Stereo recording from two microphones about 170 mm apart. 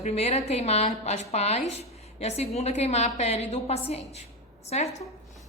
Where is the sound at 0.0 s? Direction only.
40° left (ahead or behind).